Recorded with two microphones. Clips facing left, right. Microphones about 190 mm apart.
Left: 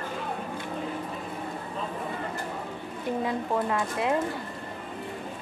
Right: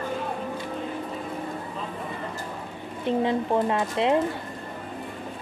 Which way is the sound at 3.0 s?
25° right (ahead or behind).